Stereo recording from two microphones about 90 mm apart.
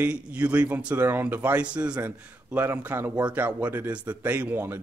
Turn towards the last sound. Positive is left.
turn(degrees=-20)  # may be behind; listen again after turning